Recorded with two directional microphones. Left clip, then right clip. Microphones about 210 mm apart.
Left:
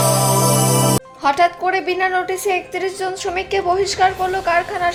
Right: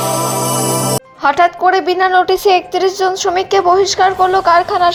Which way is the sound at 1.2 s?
15° right (ahead or behind).